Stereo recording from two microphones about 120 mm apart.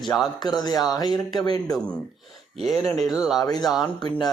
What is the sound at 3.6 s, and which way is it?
Speech, centre (ahead or behind).